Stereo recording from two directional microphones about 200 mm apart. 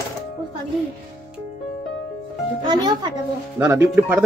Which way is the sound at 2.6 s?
20° right (ahead or behind).